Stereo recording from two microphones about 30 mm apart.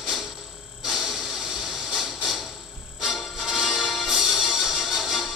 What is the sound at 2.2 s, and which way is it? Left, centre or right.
Music, centre.